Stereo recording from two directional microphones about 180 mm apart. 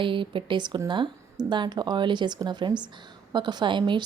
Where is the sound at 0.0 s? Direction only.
30° right (ahead or behind).